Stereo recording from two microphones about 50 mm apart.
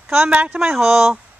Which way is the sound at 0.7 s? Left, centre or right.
Centre.